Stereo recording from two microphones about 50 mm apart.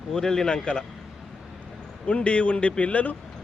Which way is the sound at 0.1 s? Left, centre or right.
Centre.